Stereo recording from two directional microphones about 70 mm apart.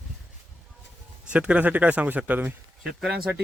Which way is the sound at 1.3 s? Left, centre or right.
Centre.